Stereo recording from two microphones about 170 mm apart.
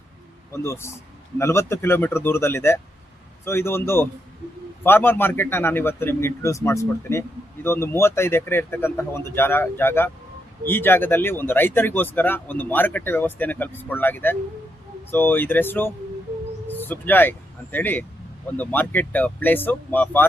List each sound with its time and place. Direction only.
0.5 s a man's voice: 15° left (ahead or behind)